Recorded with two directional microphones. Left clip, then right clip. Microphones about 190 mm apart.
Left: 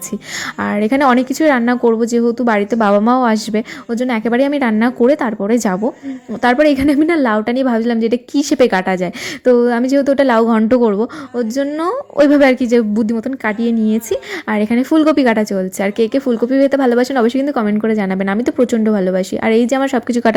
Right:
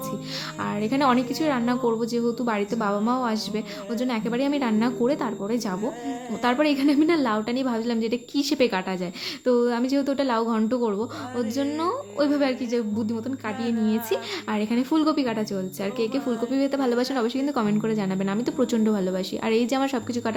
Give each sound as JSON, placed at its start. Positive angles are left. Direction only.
{"t": 0.6, "sound": "a woman's voice", "side_deg": 35}